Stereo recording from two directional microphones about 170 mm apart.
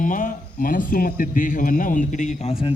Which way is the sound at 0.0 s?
50° left (ahead or behind).